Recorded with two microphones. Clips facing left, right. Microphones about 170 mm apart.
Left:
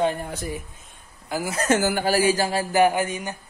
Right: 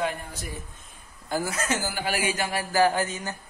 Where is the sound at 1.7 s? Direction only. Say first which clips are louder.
Left 8 dB; 60° left (ahead or behind).